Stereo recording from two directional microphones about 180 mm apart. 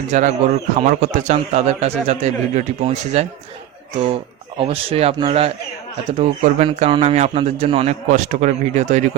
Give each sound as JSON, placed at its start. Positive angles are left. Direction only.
{"t": 0.1, "sound": "a man's voice", "side_deg": -40}